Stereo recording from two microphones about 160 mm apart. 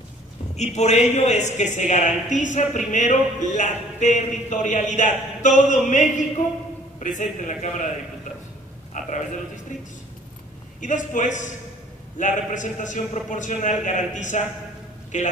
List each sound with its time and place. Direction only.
0.6 s speech: 45° left (ahead or behind)
9.0 s a sound: 50° left (ahead or behind)
9.7 s speech: 50° left (ahead or behind)